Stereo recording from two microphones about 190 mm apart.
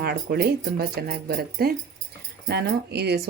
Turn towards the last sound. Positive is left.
turn(degrees=-60)  # may be behind; listen again after turning